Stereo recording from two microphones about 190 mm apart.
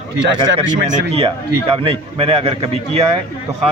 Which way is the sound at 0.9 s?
30° right (ahead or behind).